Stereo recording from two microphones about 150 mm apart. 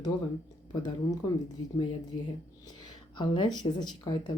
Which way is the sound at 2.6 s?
30° left (ahead or behind).